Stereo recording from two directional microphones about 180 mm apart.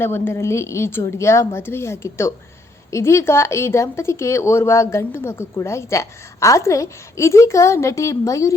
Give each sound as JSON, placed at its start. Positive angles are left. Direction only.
{"t": 0.0, "sound": "speech", "side_deg": 10}